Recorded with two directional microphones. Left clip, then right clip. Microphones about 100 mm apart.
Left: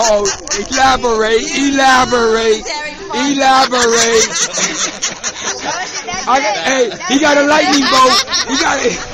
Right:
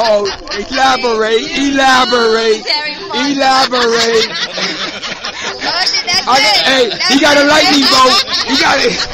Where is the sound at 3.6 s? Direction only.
30° left (ahead or behind).